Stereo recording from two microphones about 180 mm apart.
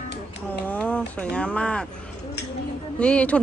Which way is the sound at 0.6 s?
5° left (ahead or behind).